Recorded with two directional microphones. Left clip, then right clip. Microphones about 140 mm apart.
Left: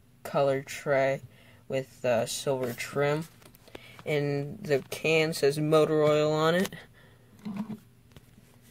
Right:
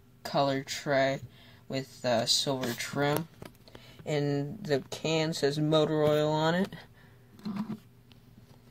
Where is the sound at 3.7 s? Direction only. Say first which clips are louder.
Left 3 dB; 15° left (ahead or behind).